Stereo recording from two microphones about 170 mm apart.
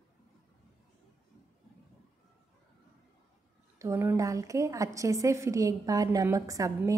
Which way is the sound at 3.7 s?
15° right (ahead or behind).